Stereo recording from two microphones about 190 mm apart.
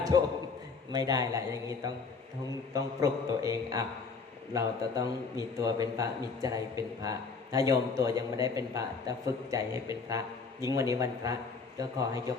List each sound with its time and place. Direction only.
0.9 s a man's voice: 20° right (ahead or behind)